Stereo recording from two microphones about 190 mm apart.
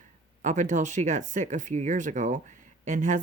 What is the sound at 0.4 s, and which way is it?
Speech, 40° right (ahead or behind).